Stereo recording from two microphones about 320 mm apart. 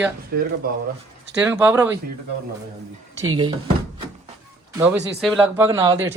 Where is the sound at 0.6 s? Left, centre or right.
Right.